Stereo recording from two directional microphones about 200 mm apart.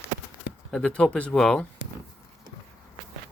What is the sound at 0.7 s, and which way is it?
Speech, 5° left (ahead or behind).